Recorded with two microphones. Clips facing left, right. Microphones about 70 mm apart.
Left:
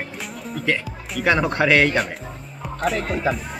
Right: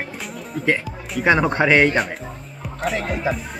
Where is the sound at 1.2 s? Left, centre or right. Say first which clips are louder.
Right 2 dB; right.